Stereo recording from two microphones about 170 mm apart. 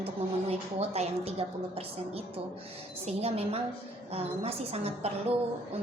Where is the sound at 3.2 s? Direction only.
35° right (ahead or behind).